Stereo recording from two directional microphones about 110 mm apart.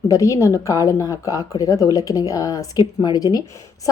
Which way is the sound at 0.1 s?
30° left (ahead or behind).